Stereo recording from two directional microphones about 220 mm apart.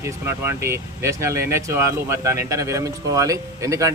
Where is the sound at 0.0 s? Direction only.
10° right (ahead or behind).